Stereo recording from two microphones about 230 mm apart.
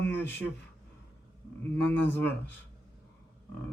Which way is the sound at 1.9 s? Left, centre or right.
Centre.